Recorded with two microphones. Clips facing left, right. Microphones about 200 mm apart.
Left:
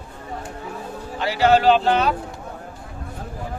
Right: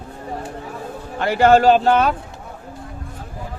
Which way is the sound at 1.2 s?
50° right (ahead or behind).